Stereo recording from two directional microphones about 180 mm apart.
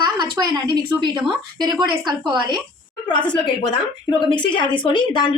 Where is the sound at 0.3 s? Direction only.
25° right (ahead or behind).